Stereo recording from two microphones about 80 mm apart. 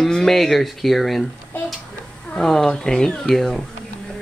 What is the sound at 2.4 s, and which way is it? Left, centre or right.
Speech, centre.